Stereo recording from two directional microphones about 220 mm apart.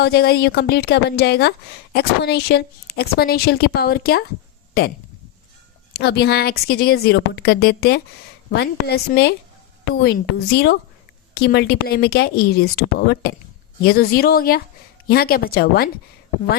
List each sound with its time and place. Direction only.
0.0 s a woman's voice: 45° left (ahead or behind)
5.9 s a woman's voice: 45° left (ahead or behind)